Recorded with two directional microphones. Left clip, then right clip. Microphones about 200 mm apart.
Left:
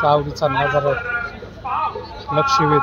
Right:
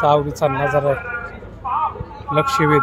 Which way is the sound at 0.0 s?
25° right (ahead or behind).